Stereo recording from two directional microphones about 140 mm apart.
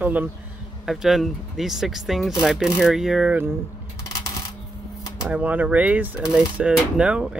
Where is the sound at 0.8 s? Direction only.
Centre (ahead or behind).